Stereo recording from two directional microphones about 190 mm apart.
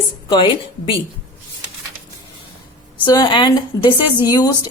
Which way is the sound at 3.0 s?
20° left (ahead or behind).